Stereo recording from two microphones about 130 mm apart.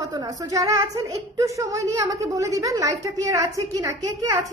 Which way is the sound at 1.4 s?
25° right (ahead or behind).